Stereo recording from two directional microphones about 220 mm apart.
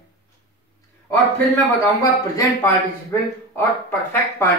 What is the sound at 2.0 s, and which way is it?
A man's voice, 10° left (ahead or behind).